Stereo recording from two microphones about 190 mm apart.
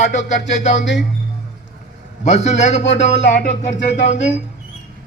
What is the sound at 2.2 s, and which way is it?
A man's voice, 35° left (ahead or behind).